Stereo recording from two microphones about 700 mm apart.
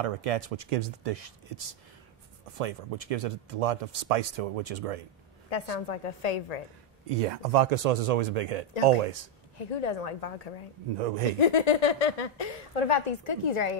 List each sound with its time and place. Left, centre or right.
0.0 s speech: right
2.6 s speech: right
5.5 s speech: left
7.2 s speech: right
9.6 s speech: left
11.0 s speech: right
11.3 s speech: left